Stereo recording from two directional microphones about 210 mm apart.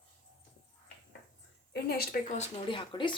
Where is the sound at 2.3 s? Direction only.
30° left (ahead or behind).